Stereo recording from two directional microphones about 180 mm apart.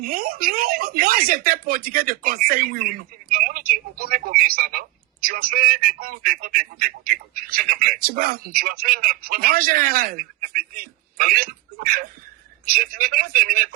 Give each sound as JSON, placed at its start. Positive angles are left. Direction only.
{"t": 0.0, "sound": "a man's voice", "side_deg": -55}